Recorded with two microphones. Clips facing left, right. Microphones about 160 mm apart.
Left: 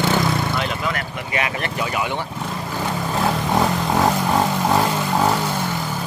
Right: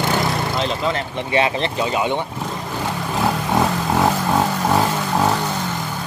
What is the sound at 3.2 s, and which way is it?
Vehicle, centre (ahead or behind).